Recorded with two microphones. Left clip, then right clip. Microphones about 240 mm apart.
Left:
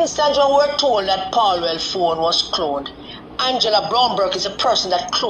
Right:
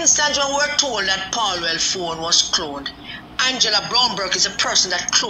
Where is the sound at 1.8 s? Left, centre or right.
Centre.